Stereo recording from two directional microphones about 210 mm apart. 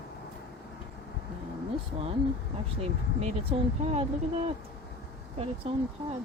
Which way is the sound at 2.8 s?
30° right (ahead or behind).